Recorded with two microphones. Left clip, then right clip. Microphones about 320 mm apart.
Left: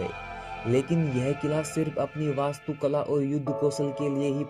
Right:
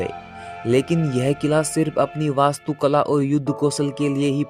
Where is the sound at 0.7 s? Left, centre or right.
Right.